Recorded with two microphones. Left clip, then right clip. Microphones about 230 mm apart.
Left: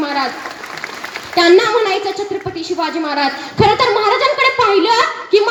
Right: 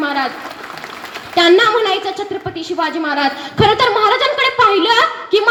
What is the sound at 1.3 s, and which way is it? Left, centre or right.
A woman's voice, right.